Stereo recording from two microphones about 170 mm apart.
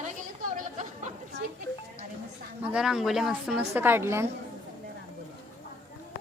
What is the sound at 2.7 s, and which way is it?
A woman's voice, 5° right (ahead or behind).